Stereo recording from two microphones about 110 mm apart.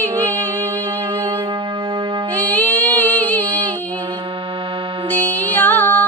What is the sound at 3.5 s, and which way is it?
Music, 35° right (ahead or behind).